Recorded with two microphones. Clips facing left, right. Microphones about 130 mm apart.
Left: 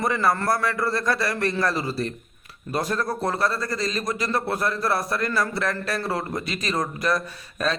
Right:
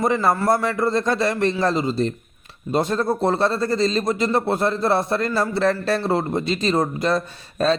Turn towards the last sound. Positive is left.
turn(degrees=-30)  # may be behind; listen again after turning